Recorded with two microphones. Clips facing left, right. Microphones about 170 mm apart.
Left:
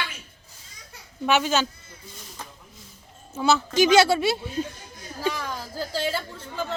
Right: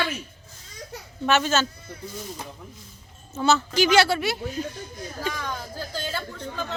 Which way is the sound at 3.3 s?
10° left (ahead or behind).